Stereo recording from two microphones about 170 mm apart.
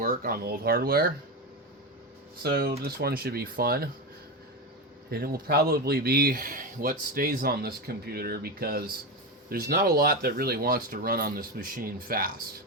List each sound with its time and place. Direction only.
0.0 s speech: 60° right (ahead or behind)
2.4 s speech: 65° right (ahead or behind)
5.1 s speech: 60° right (ahead or behind)